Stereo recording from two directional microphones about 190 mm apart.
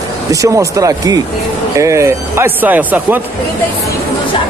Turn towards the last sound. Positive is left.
turn(degrees=-10)  # may be behind; listen again after turning